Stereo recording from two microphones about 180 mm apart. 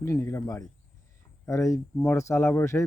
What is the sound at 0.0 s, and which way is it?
A man's voice, 15° left (ahead or behind).